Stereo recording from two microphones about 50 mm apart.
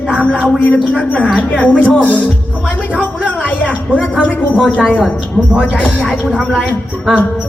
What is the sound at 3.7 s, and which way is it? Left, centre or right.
Speech, right.